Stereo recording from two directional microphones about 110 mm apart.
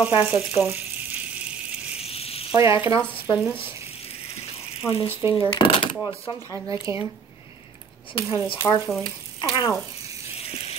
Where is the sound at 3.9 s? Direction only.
65° left (ahead or behind).